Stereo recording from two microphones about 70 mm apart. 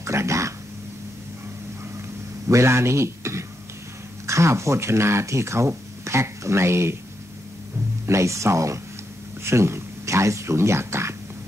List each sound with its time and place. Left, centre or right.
0.0 s a sound: right
2.4 s a man's voice: right
8.1 s speech: right